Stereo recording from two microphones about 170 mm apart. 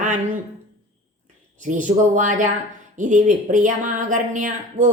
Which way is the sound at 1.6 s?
45° right (ahead or behind).